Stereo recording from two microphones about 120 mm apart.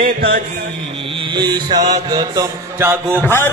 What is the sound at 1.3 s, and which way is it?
Mantra, 35° right (ahead or behind).